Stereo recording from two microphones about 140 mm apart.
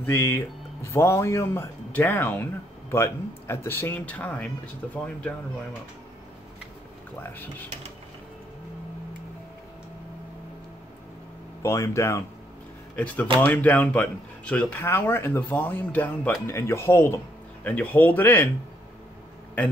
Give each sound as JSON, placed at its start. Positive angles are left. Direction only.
{"t": 0.0, "sound": "speech", "side_deg": 15}
{"t": 11.6, "sound": "speech", "side_deg": 20}
{"t": 12.9, "sound": "speech", "side_deg": 10}